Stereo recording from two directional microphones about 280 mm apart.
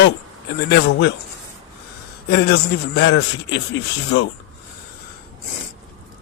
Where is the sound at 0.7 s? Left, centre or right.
Left.